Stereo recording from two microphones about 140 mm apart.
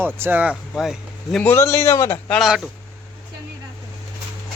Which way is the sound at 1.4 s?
15° left (ahead or behind).